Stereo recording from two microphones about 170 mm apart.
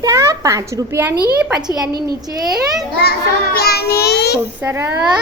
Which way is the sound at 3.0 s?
70° left (ahead or behind).